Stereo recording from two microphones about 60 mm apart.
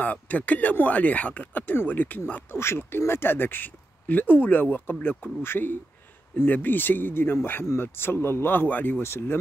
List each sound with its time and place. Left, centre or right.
0.0 s speech: left
2.5 s speech: left
9.0 s speech: left